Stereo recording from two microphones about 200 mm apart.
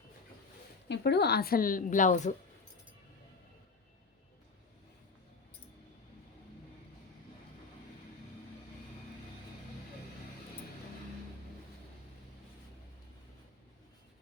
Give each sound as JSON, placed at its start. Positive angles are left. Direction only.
{"t": 0.9, "sound": "a woman's voice", "side_deg": 55}